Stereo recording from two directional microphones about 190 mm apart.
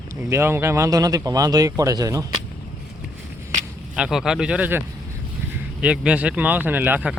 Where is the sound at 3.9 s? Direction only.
5° right (ahead or behind).